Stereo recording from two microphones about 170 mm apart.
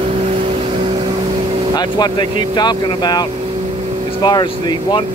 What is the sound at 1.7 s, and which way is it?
Speech, 25° left (ahead or behind).